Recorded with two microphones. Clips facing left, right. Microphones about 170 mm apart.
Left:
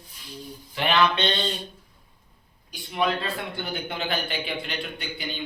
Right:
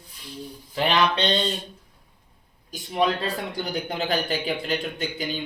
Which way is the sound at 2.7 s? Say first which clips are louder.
Right 2 dB; 40° right (ahead or behind).